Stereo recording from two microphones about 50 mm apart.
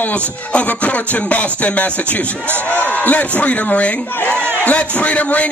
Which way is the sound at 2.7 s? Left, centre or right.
Left.